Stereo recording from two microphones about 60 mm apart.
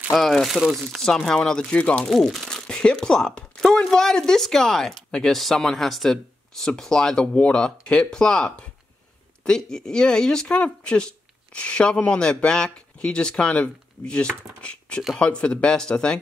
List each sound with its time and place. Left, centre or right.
0.1 s speech: centre
1.8 s speech: left
2.0 s speech: centre